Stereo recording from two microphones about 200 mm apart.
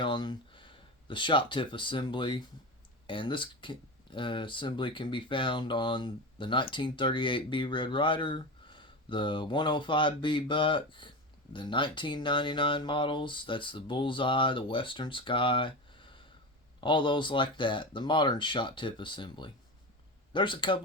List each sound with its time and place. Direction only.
0.0 s speech: 25° left (ahead or behind)